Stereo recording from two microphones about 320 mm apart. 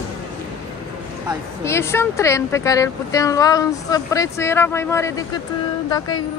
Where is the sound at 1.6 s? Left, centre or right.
Centre.